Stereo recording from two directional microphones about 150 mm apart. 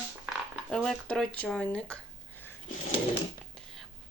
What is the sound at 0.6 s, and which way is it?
Speech, 5° left (ahead or behind).